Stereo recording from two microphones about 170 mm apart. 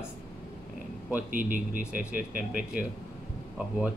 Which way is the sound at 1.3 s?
50° right (ahead or behind).